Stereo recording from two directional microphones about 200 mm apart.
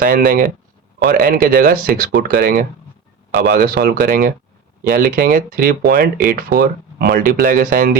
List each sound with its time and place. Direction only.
0.0 s speech: 45° right (ahead or behind)